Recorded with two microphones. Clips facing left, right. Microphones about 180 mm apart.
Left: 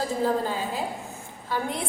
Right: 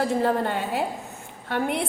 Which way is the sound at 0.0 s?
65° right (ahead or behind).